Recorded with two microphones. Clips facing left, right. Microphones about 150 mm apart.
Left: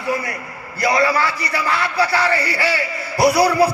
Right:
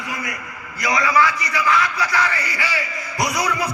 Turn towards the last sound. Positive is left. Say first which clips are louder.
# left 9 dB
turn(degrees=35)  # may be behind; listen again after turning